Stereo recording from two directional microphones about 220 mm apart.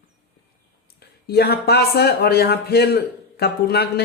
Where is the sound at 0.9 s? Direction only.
45° left (ahead or behind).